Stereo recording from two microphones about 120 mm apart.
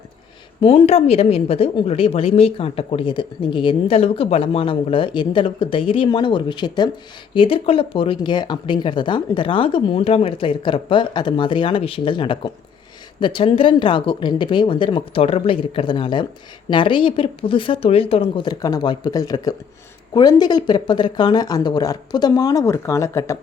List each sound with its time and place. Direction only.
0.6 s a woman's voice: 50° left (ahead or behind)
7.3 s a woman's voice: 50° left (ahead or behind)
18.4 s speech: 35° left (ahead or behind)